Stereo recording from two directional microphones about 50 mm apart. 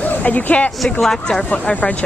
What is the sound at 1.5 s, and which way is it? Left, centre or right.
Speech, left.